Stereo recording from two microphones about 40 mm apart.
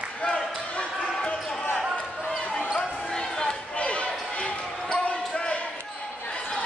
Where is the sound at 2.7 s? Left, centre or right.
Centre.